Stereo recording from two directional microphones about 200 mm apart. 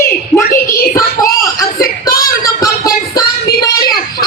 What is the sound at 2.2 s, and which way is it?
Music, 15° left (ahead or behind).